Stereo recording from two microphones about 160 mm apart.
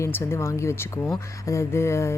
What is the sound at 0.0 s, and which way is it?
Speech, 15° left (ahead or behind).